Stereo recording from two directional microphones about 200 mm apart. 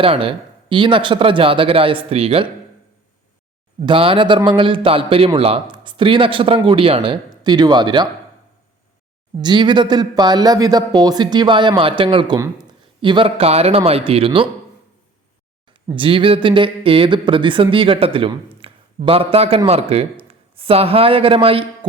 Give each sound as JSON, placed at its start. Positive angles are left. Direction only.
{"t": 0.0, "sound": "a man's voice", "side_deg": -25}
{"t": 3.8, "sound": "a man's voice", "side_deg": -25}
{"t": 9.4, "sound": "a man's voice", "side_deg": -20}
{"t": 16.0, "sound": "a man's voice", "side_deg": -25}
{"t": 18.6, "sound": "a sound", "side_deg": -30}
{"t": 19.0, "sound": "a man's voice", "side_deg": -30}